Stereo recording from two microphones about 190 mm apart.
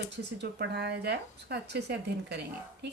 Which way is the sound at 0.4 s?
60° right (ahead or behind).